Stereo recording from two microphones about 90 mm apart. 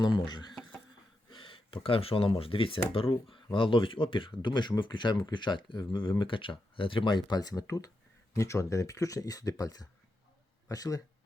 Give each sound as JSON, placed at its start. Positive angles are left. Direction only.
{"t": 0.3, "sound": "speech", "side_deg": 55}
{"t": 1.3, "sound": "speech", "side_deg": 70}